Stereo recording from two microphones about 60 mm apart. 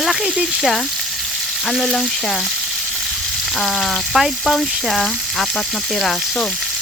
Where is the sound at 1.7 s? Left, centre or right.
Centre.